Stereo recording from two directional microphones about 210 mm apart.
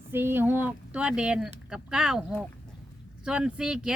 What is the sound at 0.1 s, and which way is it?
Speech, 10° right (ahead or behind).